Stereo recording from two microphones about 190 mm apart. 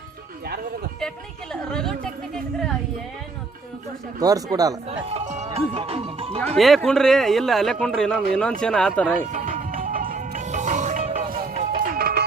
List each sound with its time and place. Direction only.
1.6 s a sound: 5° left (ahead or behind)
4.2 s speech: 20° right (ahead or behind)
4.9 s speech: 35° right (ahead or behind)
6.6 s a man's voice: centre (ahead or behind)
9.2 s music: 40° right (ahead or behind)